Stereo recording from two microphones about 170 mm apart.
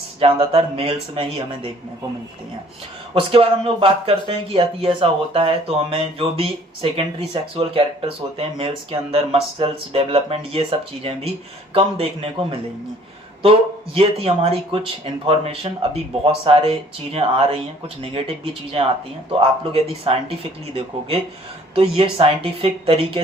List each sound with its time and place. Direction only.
0.2 s speech: 35° right (ahead or behind)
3.2 s speech: 35° right (ahead or behind)